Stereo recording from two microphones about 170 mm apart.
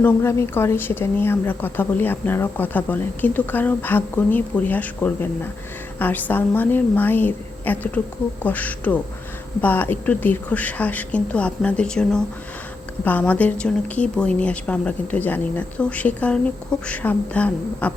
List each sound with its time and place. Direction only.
0.0 s a woman's voice: 15° left (ahead or behind)